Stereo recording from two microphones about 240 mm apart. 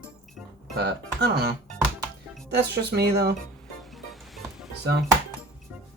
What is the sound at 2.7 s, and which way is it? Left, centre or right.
Speech, right.